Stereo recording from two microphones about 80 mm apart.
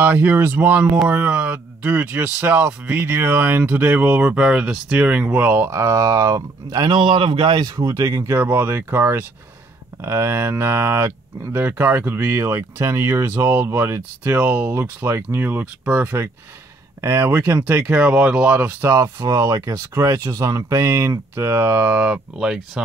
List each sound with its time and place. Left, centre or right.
0.0 s speech: right
5.8 s speech: right
7.0 s a man's voice: right
7.7 s speech: right
8.4 s speech: right
18.8 s speech: right
21.9 s speech: centre